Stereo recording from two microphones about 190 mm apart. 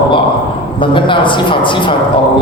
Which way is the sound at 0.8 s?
25° left (ahead or behind).